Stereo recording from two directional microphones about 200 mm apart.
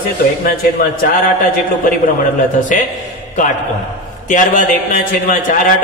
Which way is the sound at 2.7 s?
40° left (ahead or behind).